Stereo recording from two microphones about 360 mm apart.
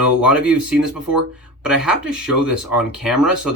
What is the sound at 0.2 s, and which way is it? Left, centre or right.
Speech, centre.